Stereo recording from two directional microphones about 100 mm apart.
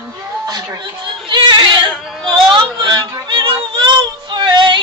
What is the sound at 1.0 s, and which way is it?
Yodeling, 55° right (ahead or behind).